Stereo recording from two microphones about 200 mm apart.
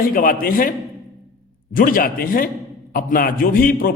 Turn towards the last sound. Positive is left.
turn(degrees=45)  # may be behind; listen again after turning